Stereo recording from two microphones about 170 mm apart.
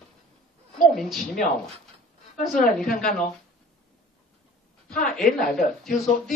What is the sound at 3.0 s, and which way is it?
Speech, 5° left (ahead or behind).